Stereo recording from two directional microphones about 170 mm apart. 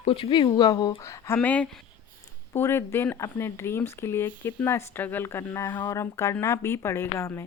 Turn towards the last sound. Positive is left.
turn(degrees=15)  # may be behind; listen again after turning